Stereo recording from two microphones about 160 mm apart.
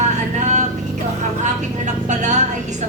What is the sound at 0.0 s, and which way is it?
Vehicle, 45° right (ahead or behind).